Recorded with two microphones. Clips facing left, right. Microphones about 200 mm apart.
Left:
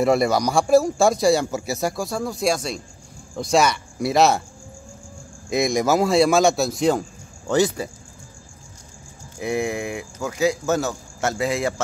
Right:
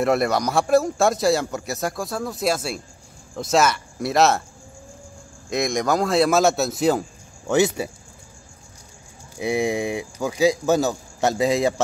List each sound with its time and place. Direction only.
0.0 s speech: centre (ahead or behind)
5.5 s speech: centre (ahead or behind)
7.4 s speech: 20° right (ahead or behind)
9.4 s speech: 15° right (ahead or behind)